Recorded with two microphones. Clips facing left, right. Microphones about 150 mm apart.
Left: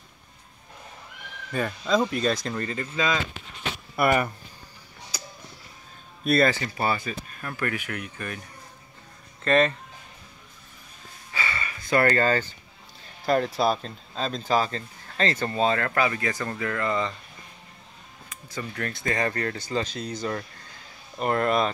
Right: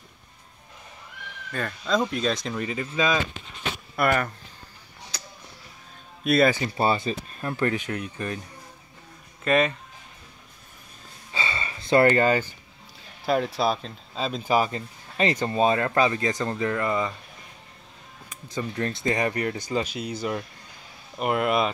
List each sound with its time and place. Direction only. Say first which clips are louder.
1.5 s speech: left 2 dB; 5° left (ahead or behind); by 3.2 s 10° right (ahead or behind)
3.9 s speech: left 1 dB; 5° left (ahead or behind)
5.1 s tick-tock: left 2 dB; 10° left (ahead or behind)
6.2 s speech: right 1 dB; centre (ahead or behind)
6.5 s speech: right 3 dB; 25° right (ahead or behind)
9.4 s speech: left 1 dB; 5° right (ahead or behind)
11.3 s a sound: right 1 dB; 20° right (ahead or behind)
13.2 s speech: left 1 dB; 5° right (ahead or behind)
18.3 s speech: right 4 dB; 20° right (ahead or behind)